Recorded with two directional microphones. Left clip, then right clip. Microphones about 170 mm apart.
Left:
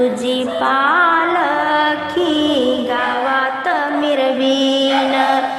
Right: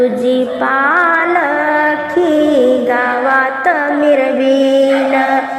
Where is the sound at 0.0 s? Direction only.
15° right (ahead or behind).